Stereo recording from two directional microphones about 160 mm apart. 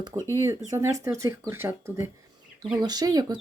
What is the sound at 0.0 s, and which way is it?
Speech, 20° right (ahead or behind).